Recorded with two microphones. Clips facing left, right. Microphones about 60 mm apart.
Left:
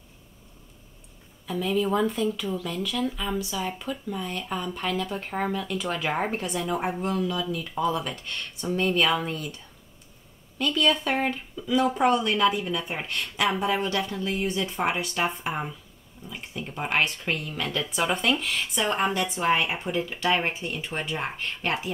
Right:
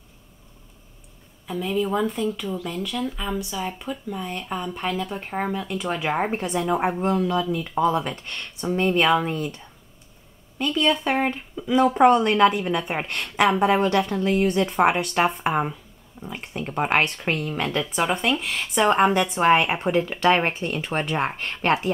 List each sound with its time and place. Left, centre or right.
1.5 s a woman's voice: centre; by 9.6 s right
10.6 s a woman's voice: centre; by 21.9 s right